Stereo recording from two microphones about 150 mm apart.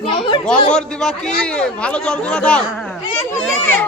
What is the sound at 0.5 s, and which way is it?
Speech, 35° left (ahead or behind).